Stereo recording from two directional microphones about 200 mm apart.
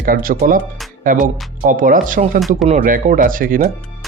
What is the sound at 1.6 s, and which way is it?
Speech, 40° right (ahead or behind).